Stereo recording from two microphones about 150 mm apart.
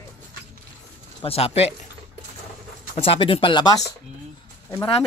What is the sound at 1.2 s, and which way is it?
Speech, 40° left (ahead or behind).